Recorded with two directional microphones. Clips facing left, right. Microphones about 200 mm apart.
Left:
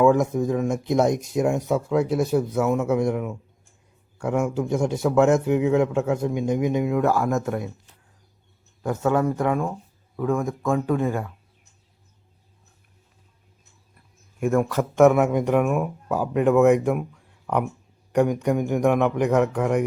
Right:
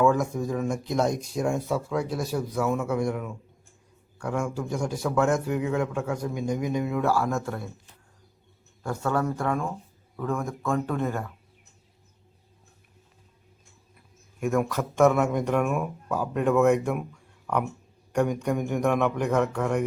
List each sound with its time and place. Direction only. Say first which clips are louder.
0.0 s a man's voice: left 5 dB; 20° left (ahead or behind)
8.8 s speech: left 5 dB; 20° left (ahead or behind)
14.3 s speech: left 4 dB; centre (ahead or behind)
14.8 s speech: left 5 dB; 15° left (ahead or behind)
17.4 s a sound: left 3 dB; 10° left (ahead or behind)
18.4 s speech: left 4 dB; 10° left (ahead or behind)